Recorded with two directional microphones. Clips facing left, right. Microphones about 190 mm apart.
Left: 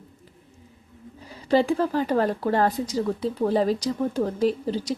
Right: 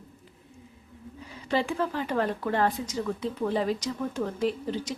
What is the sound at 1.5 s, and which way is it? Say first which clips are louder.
A woman's voice: left 7 dB; 35° left (ahead or behind).